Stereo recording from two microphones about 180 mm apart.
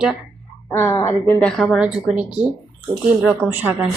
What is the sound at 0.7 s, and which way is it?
Speech, 15° left (ahead or behind).